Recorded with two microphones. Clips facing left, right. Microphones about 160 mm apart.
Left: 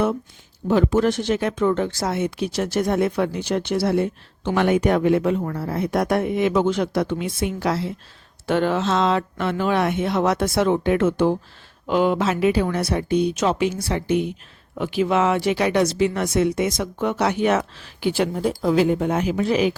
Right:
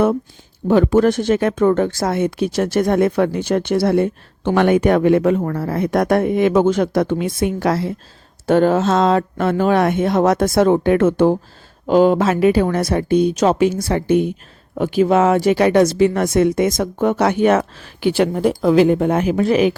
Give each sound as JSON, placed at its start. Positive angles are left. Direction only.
{"t": 0.7, "sound": "speech", "side_deg": -55}
{"t": 5.8, "sound": "speech", "side_deg": -55}
{"t": 11.9, "sound": "speech", "side_deg": -40}
{"t": 13.3, "sound": "speech", "side_deg": -40}
{"t": 18.0, "sound": "speech", "side_deg": -70}